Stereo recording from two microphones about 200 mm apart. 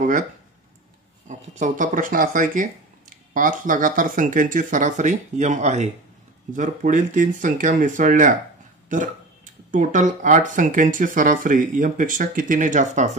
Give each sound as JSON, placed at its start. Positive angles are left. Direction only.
{"t": 1.2, "sound": "speech", "side_deg": -35}
{"t": 8.8, "sound": "burping", "side_deg": -40}
{"t": 9.7, "sound": "speech", "side_deg": -40}